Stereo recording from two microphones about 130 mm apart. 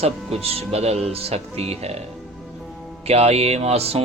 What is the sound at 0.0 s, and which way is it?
Mantra, 50° right (ahead or behind).